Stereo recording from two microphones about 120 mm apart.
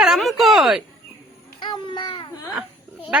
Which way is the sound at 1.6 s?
40° left (ahead or behind).